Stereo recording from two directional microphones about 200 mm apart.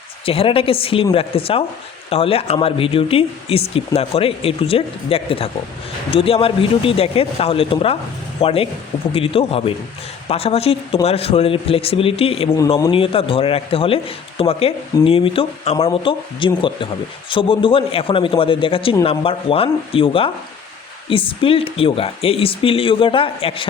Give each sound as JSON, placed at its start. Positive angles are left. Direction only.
{"t": 0.3, "sound": "speech", "side_deg": 25}
{"t": 12.5, "sound": "speech", "side_deg": 20}